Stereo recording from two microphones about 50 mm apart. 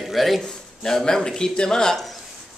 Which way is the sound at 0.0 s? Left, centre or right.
Centre.